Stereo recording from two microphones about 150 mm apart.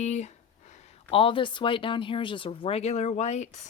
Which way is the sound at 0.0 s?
50° left (ahead or behind).